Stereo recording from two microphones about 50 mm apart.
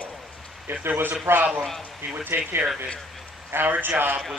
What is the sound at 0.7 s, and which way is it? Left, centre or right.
A man's voice, right.